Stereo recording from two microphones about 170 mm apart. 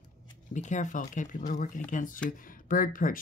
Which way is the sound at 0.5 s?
45° left (ahead or behind).